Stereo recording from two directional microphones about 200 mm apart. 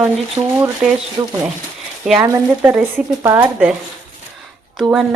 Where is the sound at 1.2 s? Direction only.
15° right (ahead or behind).